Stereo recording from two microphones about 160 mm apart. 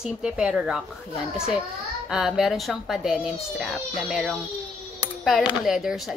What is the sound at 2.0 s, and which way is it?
Speech, 5° right (ahead or behind).